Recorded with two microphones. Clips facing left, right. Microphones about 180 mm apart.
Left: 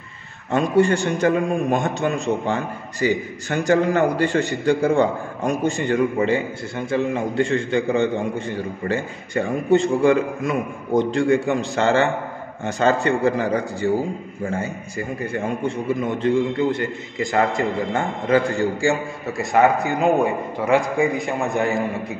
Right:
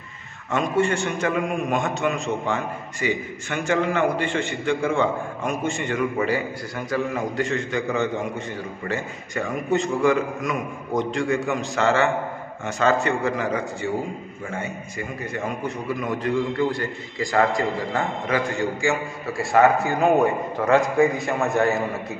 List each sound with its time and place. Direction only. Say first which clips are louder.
0.5 s a man's voice: left 4 dB; 35° left (ahead or behind)
19.3 s a man's voice: even; 20° left (ahead or behind)